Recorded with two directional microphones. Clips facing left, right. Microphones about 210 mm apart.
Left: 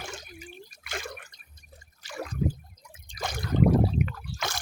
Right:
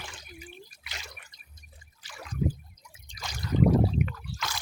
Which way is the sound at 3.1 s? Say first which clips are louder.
Left 2 dB; 55° left (ahead or behind).